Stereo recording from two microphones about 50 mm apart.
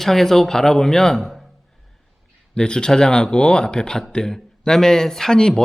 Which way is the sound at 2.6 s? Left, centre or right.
Centre.